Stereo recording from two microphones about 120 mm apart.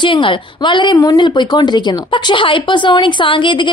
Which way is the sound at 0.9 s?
30° left (ahead or behind).